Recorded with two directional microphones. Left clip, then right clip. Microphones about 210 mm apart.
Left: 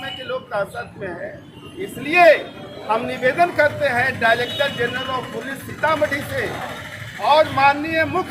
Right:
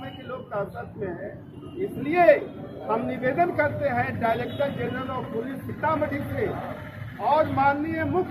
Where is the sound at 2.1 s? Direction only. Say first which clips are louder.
Left 6 dB; 10° left (ahead or behind).